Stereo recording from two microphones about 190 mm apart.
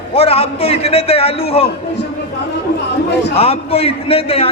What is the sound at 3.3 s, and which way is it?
A man's voice, 30° left (ahead or behind).